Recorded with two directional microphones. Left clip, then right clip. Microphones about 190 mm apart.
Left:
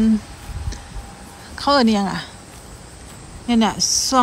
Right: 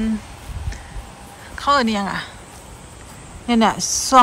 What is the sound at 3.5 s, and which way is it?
Speech, 10° left (ahead or behind).